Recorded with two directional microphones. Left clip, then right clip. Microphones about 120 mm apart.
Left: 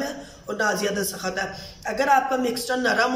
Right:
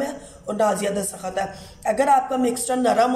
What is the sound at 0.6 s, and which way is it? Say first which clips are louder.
A man's voice: right 2 dB; 35° right (ahead or behind).